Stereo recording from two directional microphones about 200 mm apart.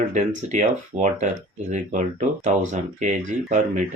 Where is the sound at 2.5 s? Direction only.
40° right (ahead or behind).